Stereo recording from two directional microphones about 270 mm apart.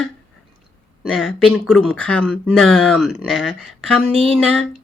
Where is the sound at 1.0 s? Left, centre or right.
Centre.